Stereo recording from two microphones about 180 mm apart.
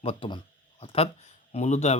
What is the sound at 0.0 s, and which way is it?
Speech, 30° left (ahead or behind).